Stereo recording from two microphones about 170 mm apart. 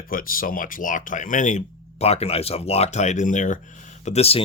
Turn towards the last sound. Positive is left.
turn(degrees=35)  # may be behind; listen again after turning